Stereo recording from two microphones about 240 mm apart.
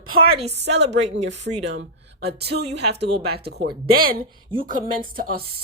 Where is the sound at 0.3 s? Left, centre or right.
Right.